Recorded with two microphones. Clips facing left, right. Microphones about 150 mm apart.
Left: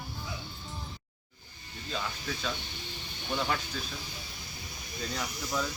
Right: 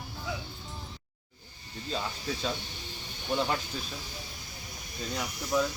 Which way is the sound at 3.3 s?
20° right (ahead or behind).